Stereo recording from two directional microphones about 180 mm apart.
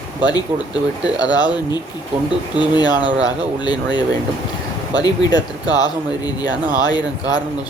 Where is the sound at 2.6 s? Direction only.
25° left (ahead or behind).